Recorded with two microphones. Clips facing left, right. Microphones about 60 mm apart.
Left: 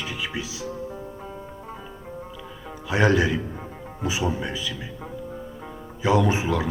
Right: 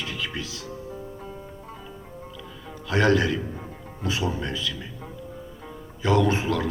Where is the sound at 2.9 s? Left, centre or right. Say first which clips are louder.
Left 1 dB; centre.